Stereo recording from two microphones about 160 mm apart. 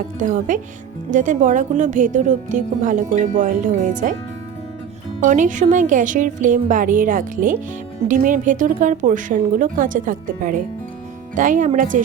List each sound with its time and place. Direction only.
0.2 s speech: 55° right (ahead or behind)
5.2 s speech: 55° right (ahead or behind)